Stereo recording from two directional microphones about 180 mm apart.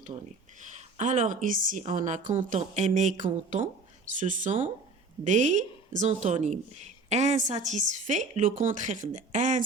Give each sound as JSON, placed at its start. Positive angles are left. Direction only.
{"t": 0.6, "sound": "a woman's voice", "side_deg": -40}